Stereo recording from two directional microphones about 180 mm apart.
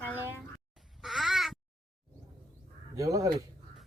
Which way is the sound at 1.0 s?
Centre (ahead or behind).